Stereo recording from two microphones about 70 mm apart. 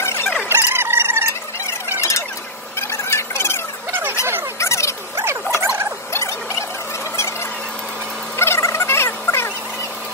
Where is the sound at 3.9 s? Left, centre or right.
Right.